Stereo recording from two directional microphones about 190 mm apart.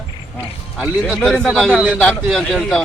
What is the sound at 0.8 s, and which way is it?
Speech, centre (ahead or behind).